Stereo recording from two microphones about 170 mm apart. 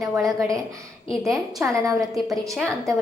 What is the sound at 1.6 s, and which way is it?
Speech, 20° right (ahead or behind).